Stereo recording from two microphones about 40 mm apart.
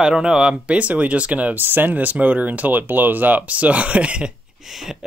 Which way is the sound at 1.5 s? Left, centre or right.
Right.